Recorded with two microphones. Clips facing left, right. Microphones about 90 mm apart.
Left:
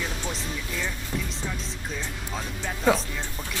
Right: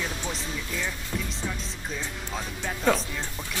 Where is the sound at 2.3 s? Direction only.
Centre (ahead or behind).